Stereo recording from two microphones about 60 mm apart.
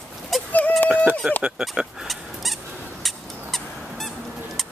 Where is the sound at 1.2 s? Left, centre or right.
Centre.